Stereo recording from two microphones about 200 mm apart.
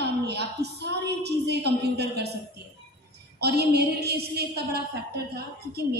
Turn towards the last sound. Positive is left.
turn(degrees=-50)  # may be behind; listen again after turning